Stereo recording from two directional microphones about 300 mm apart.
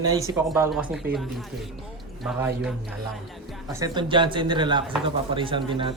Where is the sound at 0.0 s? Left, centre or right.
Centre.